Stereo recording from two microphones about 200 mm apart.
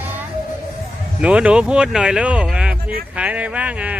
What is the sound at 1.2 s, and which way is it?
Speech, 5° right (ahead or behind).